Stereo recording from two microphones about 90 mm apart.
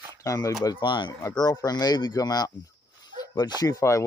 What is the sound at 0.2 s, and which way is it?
Speech, 35° left (ahead or behind).